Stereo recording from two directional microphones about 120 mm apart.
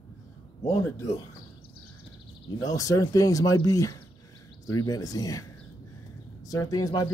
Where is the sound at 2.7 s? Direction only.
30° left (ahead or behind).